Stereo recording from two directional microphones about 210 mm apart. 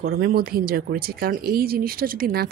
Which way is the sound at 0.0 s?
45° right (ahead or behind).